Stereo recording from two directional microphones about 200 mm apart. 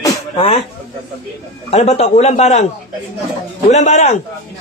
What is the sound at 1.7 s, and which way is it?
Speech, 35° left (ahead or behind).